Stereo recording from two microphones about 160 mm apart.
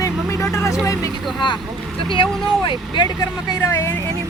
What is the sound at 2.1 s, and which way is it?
Speech, 30° left (ahead or behind).